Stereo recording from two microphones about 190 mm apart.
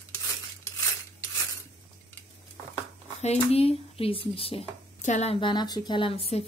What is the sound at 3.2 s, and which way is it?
Speech, 35° left (ahead or behind).